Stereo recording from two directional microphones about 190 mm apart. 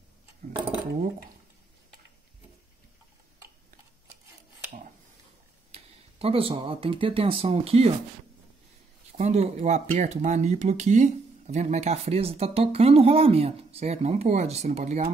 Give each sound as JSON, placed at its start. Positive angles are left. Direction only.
{"t": 5.7, "sound": "speech", "side_deg": -30}
{"t": 9.1, "sound": "speech", "side_deg": -35}